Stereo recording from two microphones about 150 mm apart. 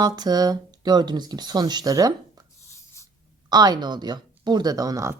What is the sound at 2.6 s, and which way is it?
Writing, 20° left (ahead or behind).